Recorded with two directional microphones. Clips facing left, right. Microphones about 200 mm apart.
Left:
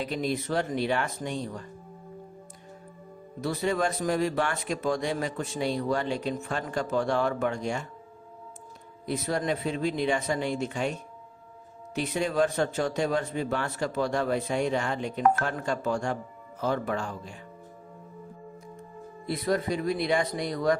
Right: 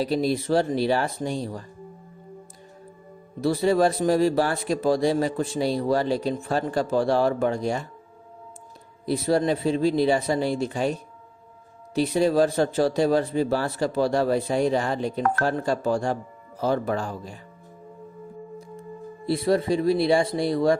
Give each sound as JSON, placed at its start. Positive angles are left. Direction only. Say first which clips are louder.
{"t": 0.0, "sound": "speech", "louder": "right 6 dB", "side_deg": -35}
{"t": 3.4, "sound": "speech", "louder": "right 7 dB", "side_deg": -30}
{"t": 9.0, "sound": "speech", "louder": "right 7 dB", "side_deg": -30}
{"t": 11.9, "sound": "speech", "louder": "right 6 dB", "side_deg": -35}
{"t": 19.2, "sound": "speech", "louder": "right 5 dB", "side_deg": -30}